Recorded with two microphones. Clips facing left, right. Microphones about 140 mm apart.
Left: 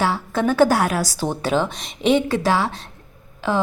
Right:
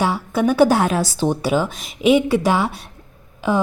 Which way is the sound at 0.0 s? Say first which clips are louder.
Right 2 dB; 15° right (ahead or behind).